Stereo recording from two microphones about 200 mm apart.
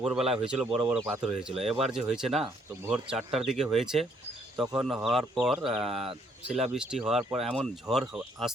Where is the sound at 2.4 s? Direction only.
15° right (ahead or behind).